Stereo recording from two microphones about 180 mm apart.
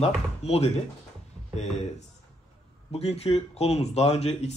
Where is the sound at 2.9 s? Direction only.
35° left (ahead or behind).